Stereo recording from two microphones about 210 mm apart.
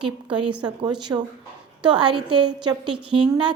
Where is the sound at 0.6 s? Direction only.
20° right (ahead or behind).